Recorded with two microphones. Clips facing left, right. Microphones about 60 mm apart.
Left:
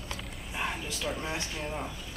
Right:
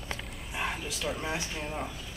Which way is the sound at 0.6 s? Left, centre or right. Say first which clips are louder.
Even; centre.